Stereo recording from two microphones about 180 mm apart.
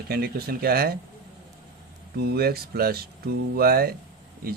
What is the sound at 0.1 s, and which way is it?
Speech, 60° right (ahead or behind).